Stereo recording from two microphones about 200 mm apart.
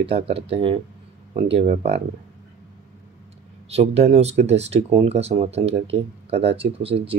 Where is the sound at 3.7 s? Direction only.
30° right (ahead or behind).